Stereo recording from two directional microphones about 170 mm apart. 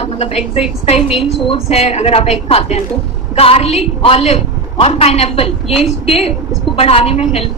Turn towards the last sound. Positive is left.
turn(degrees=40)  # may be behind; listen again after turning